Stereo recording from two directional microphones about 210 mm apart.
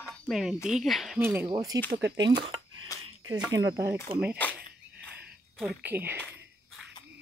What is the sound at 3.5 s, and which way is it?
Speech, 15° right (ahead or behind).